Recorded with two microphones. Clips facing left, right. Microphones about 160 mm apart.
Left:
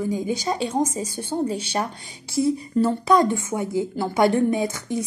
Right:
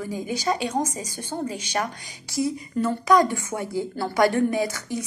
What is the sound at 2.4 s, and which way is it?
A woman's voice, 30° left (ahead or behind).